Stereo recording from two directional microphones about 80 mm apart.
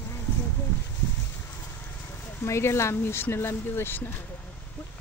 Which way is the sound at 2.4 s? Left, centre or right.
Left.